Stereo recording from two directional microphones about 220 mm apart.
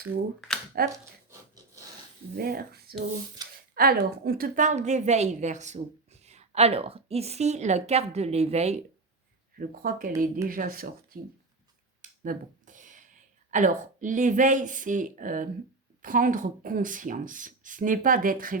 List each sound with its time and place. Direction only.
0.7 s speech: 45° right (ahead or behind)
2.3 s a woman's voice: 45° right (ahead or behind)
9.6 s a woman's voice: 40° right (ahead or behind)
12.2 s a sound: 35° right (ahead or behind)
13.5 s a woman's voice: 35° right (ahead or behind)